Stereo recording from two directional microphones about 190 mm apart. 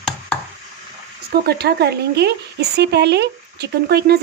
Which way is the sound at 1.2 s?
55° right (ahead or behind).